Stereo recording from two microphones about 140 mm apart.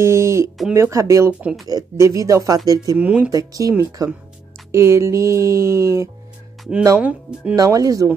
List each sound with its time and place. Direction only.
0.0 s a sound: 20° right (ahead or behind)
0.7 s speech: 20° right (ahead or behind)
1.4 s speech: 5° right (ahead or behind)
1.7 s speech: 25° right (ahead or behind)
3.0 s speech: 10° right (ahead or behind)
3.3 s speech: 25° right (ahead or behind)
7.0 s speech: 10° right (ahead or behind)
7.5 s speech: 25° right (ahead or behind)